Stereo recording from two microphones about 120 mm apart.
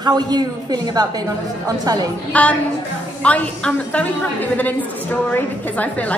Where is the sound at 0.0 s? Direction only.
35° right (ahead or behind).